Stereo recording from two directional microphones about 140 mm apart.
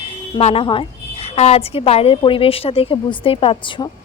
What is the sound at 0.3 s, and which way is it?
A woman's voice, 40° left (ahead or behind).